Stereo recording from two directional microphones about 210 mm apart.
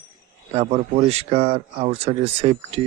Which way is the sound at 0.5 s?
30° right (ahead or behind).